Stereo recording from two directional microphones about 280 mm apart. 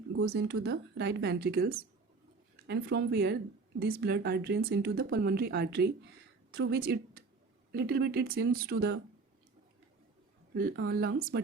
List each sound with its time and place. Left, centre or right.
0.2 s speech: right
10.5 s speech: right